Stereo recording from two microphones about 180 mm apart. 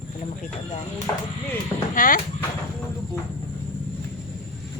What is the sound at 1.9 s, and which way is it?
Speech, 50° left (ahead or behind).